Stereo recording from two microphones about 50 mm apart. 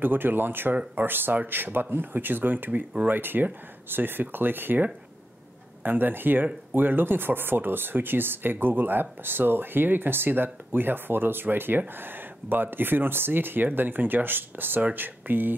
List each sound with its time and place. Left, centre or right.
0.0 s speech: right
5.9 s speech: right